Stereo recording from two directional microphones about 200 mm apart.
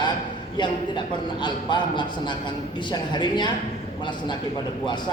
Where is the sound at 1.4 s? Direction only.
20° left (ahead or behind).